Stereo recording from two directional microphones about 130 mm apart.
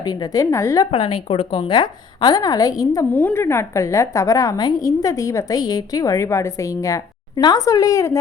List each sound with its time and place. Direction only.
0.0 s a woman's voice: 30° left (ahead or behind)
0.9 s a woman's voice: 45° left (ahead or behind); by 3.1 s 25° left (ahead or behind)
3.1 s a woman's voice: 15° left (ahead or behind)